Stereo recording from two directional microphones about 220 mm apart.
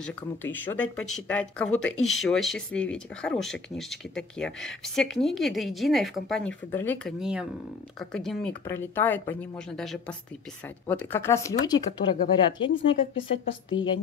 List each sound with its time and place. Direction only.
0.0 s speech: 10° left (ahead or behind)
7.2 s speech: centre (ahead or behind); by 12.9 s 20° left (ahead or behind)